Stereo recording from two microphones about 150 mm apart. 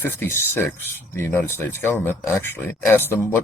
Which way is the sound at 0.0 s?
15° left (ahead or behind).